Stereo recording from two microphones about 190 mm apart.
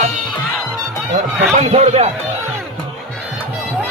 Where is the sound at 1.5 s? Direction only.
35° right (ahead or behind).